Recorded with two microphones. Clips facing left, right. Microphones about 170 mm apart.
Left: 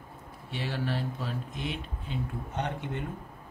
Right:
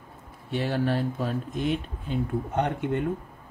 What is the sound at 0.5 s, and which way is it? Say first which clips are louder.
Speech: right 7 dB; 50° right (ahead or behind).